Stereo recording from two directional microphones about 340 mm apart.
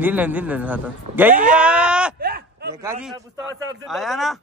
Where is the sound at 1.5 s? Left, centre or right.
Centre.